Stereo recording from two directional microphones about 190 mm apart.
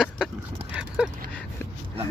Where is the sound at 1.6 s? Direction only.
10° left (ahead or behind).